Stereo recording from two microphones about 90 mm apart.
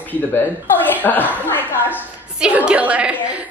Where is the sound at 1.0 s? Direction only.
20° left (ahead or behind).